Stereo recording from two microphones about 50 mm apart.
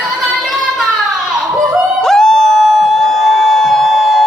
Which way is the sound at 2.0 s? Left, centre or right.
Centre.